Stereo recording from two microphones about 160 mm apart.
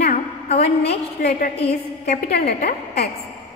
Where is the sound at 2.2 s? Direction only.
85° left.